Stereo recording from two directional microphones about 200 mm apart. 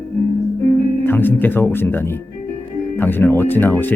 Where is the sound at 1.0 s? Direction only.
10° left (ahead or behind).